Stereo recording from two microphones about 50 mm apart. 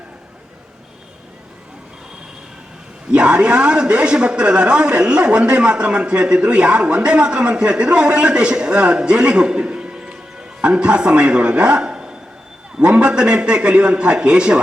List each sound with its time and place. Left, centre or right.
3.1 s a man's voice: centre